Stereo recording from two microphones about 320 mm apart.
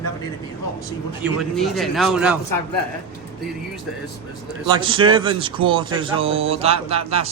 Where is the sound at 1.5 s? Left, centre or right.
Centre.